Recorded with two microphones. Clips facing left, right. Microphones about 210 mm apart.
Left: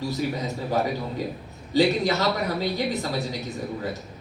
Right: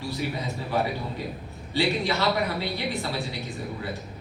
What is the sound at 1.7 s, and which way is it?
Speech, 40° left (ahead or behind).